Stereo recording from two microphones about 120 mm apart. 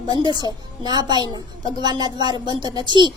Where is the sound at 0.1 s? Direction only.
35° right (ahead or behind).